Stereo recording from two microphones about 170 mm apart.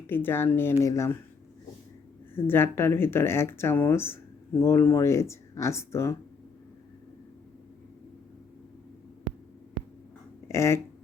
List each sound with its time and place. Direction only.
0.1 s speech: 10° left (ahead or behind)
2.3 s speech: 15° left (ahead or behind)
10.5 s a sound: 15° left (ahead or behind)